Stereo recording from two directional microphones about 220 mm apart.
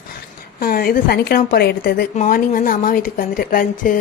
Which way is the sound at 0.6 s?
40° left (ahead or behind).